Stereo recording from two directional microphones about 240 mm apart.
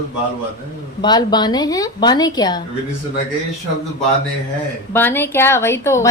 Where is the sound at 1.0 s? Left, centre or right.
Centre.